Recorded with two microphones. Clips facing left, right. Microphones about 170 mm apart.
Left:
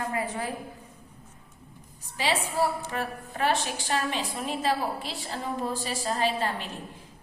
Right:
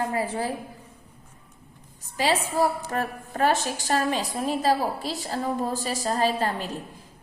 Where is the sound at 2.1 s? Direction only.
40° right (ahead or behind).